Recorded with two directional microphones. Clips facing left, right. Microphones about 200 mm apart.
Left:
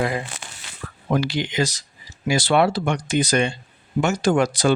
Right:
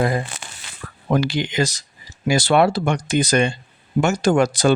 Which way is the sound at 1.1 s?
50° right (ahead or behind).